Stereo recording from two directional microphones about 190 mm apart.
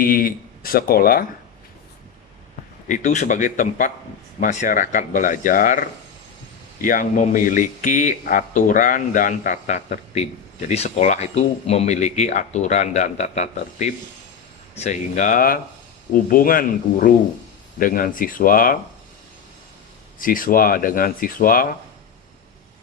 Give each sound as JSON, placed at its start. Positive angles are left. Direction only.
{"t": 0.0, "sound": "speech", "side_deg": 50}
{"t": 2.9, "sound": "speech", "side_deg": 40}
{"t": 6.8, "sound": "speech", "side_deg": 45}
{"t": 20.1, "sound": "speech", "side_deg": 45}